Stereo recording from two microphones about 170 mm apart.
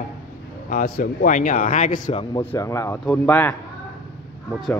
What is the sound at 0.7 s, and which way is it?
Speech, 55° left (ahead or behind).